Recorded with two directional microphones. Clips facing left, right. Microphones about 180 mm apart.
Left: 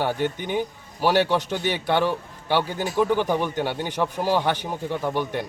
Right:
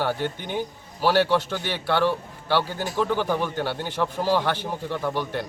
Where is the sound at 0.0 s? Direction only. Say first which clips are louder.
Left 2 dB; 15° left (ahead or behind).